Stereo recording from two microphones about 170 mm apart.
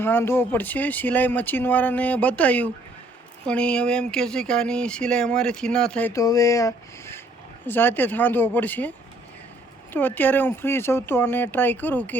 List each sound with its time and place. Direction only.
0.0 s speech: 15° left (ahead or behind)
6.1 s speech: 20° left (ahead or behind)
9.9 s speech: 10° left (ahead or behind)